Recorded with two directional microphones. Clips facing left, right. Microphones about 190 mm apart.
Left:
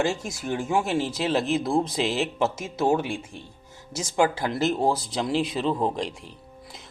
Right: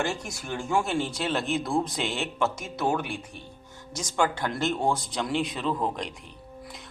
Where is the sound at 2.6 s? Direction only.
25° left (ahead or behind).